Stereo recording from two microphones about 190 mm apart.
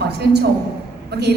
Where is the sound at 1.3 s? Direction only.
60° right (ahead or behind).